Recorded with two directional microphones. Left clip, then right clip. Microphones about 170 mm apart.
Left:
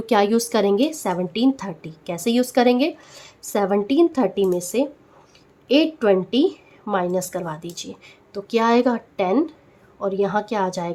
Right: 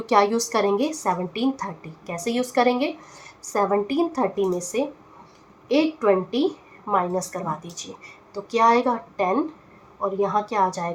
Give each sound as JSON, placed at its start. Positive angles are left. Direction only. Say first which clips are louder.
{"t": 0.0, "sound": "a woman's voice", "louder": "left 1 dB", "side_deg": 40}
{"t": 6.1, "sound": "a woman's voice", "louder": "left 3 dB", "side_deg": 40}